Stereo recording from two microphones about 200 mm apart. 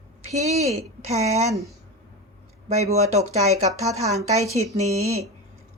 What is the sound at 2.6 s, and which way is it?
Speech, 35° right (ahead or behind).